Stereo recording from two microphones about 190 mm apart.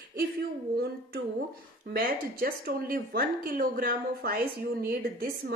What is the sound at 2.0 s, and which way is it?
Speech, 50° right (ahead or behind).